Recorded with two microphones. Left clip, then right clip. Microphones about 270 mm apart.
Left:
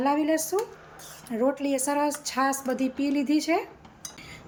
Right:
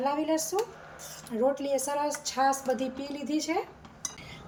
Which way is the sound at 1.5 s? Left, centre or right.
Centre.